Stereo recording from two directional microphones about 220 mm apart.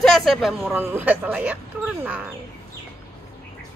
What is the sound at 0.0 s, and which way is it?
A woman's voice, centre (ahead or behind).